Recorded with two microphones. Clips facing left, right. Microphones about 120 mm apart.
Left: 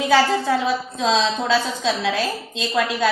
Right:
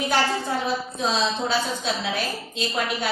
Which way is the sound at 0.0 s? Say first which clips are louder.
Left 6 dB; 90° left.